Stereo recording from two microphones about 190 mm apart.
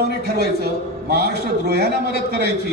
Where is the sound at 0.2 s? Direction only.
55° right (ahead or behind).